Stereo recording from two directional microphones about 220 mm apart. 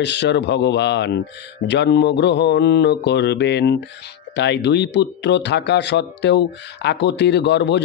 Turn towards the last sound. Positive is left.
turn(degrees=50)  # may be behind; listen again after turning